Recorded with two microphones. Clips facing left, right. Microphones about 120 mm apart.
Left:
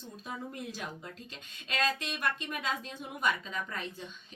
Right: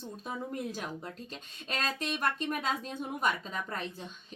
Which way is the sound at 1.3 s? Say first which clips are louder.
Left 2 dB; 35° right (ahead or behind).